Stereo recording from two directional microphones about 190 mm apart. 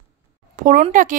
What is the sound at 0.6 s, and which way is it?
Speech, 45° right (ahead or behind).